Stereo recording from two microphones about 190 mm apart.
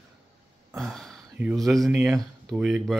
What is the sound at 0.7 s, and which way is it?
A man's voice, centre (ahead or behind).